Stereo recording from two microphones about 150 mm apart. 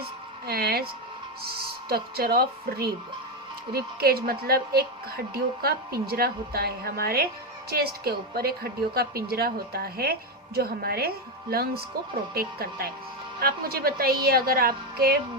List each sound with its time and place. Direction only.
0.4 s a woman's voice: 90° right